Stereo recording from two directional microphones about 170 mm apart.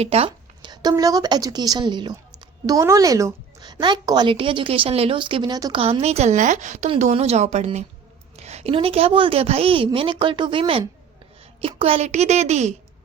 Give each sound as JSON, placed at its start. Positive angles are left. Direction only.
{"t": 0.0, "sound": "a woman's voice", "side_deg": -35}
{"t": 5.8, "sound": "a woman's voice", "side_deg": -35}